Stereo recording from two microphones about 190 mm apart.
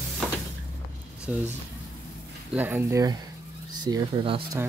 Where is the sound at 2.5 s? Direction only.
10° right (ahead or behind); by 4.6 s 30° right (ahead or behind).